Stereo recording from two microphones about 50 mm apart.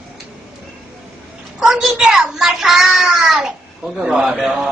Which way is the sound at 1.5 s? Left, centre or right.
Centre.